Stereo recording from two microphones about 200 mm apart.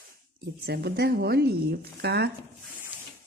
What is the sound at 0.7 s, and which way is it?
Speech, 55° right (ahead or behind).